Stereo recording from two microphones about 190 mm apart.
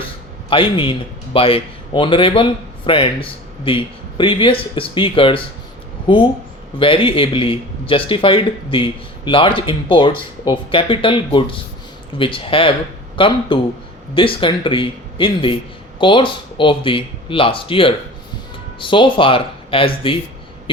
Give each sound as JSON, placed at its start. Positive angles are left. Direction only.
{"t": 0.5, "sound": "a man's voice", "side_deg": 25}